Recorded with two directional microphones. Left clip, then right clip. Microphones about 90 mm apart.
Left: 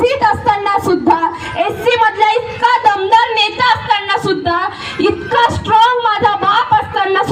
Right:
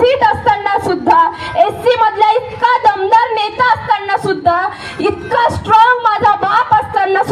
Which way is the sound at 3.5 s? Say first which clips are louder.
Even; 35° right (ahead or behind).